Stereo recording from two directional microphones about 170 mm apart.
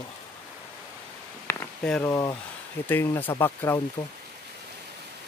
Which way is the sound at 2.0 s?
20° left (ahead or behind).